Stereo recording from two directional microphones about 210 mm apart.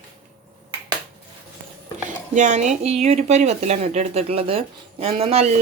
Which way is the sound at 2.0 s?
35° right (ahead or behind).